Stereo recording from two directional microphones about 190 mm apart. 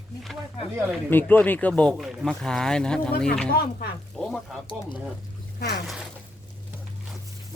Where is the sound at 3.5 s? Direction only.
55° left (ahead or behind).